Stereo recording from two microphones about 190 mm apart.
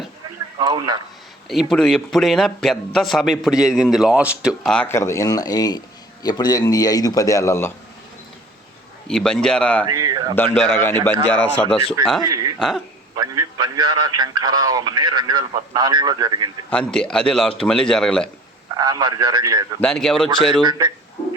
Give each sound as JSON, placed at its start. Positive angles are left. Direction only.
{"t": 0.6, "sound": "a man's voice", "side_deg": -20}
{"t": 1.7, "sound": "a man's voice", "side_deg": 5}
{"t": 9.0, "sound": "a man's voice", "side_deg": 5}
{"t": 9.8, "sound": "speech", "side_deg": -20}
{"t": 10.3, "sound": "a man's voice", "side_deg": 10}
{"t": 12.3, "sound": "a man's voice", "side_deg": -20}
{"t": 12.5, "sound": "a man's voice", "side_deg": 0}
{"t": 13.1, "sound": "a man's voice", "side_deg": -20}
{"t": 16.6, "sound": "a man's voice", "side_deg": 5}
{"t": 18.7, "sound": "a man's voice", "side_deg": -20}
{"t": 19.8, "sound": "a man's voice", "side_deg": 5}
{"t": 20.6, "sound": "a man's voice", "side_deg": -25}